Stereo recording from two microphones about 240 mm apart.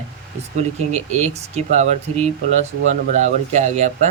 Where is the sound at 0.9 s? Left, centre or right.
Right.